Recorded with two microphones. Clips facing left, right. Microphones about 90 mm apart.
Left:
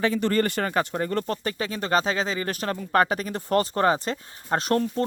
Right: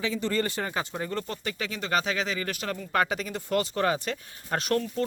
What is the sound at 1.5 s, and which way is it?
Speech, 35° left (ahead or behind).